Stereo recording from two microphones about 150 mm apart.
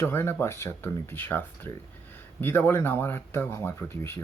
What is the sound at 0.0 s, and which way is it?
Speech, 15° left (ahead or behind).